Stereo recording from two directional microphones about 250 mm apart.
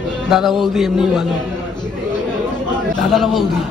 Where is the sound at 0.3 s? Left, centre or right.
Centre.